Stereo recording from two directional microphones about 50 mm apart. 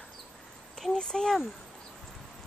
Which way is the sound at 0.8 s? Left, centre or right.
Centre.